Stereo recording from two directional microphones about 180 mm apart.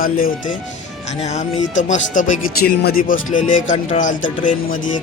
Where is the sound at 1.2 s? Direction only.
40° left (ahead or behind).